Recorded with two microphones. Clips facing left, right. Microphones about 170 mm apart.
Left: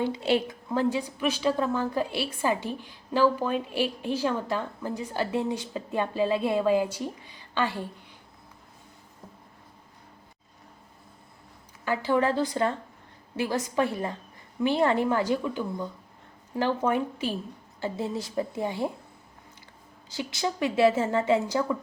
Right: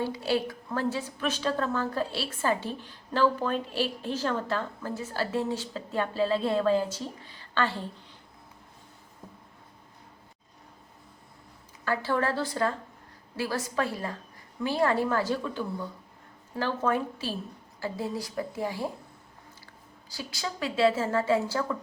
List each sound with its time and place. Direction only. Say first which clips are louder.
0.0 s a woman's voice: left 3 dB; 20° left (ahead or behind)
11.9 s a woman's voice: left 3 dB; 15° left (ahead or behind)
20.1 s a woman's voice: left 6 dB; 20° left (ahead or behind)